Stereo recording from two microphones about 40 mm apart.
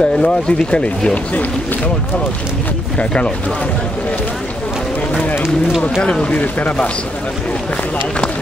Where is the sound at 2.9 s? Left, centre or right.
Left.